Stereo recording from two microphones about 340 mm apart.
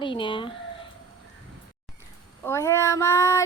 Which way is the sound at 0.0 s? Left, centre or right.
Centre.